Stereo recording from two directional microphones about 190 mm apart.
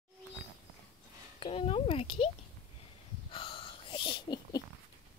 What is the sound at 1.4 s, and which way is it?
Speech, 30° left (ahead or behind).